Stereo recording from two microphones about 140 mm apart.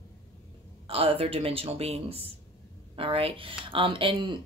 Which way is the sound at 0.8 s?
45° right (ahead or behind).